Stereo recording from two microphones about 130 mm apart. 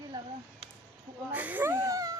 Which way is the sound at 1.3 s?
10° right (ahead or behind).